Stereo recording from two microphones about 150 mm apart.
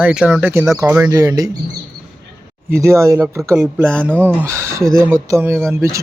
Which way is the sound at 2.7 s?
20° right (ahead or behind).